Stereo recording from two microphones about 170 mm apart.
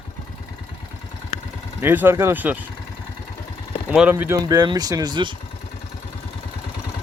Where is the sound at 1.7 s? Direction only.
15° right (ahead or behind).